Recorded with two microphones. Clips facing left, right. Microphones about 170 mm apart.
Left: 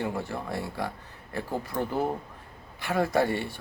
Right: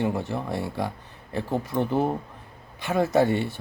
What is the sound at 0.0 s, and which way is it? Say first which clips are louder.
Speech: right 5 dB; 20° right (ahead or behind).